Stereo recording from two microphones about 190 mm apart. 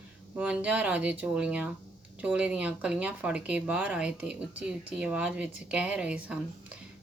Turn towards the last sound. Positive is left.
turn(degrees=-5)  # may be behind; listen again after turning